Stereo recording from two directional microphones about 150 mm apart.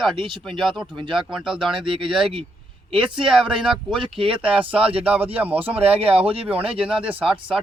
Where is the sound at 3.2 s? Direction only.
5° right (ahead or behind).